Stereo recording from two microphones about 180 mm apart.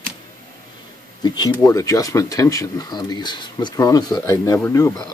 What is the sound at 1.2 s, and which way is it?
Speech, 25° left (ahead or behind).